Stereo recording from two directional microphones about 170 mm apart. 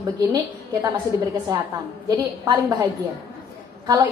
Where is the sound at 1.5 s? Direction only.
25° right (ahead or behind).